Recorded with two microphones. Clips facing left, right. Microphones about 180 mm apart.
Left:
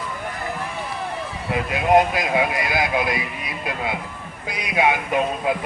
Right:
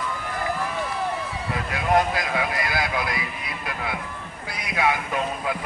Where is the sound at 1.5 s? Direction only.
20° left (ahead or behind).